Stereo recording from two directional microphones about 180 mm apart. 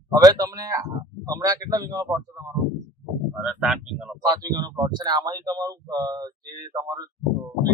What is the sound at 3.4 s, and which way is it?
Speech, 5° right (ahead or behind).